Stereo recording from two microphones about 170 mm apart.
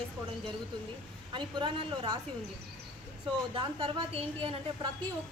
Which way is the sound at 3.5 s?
30° right (ahead or behind).